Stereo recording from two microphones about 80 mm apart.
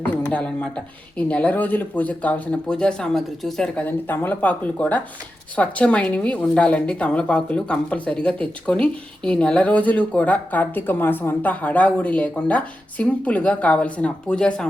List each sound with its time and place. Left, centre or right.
0.2 s a woman's voice: centre
3.8 s a woman's voice: left; by 14.7 s centre